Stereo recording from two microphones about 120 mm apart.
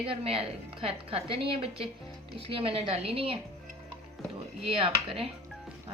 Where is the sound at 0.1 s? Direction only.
50° right (ahead or behind).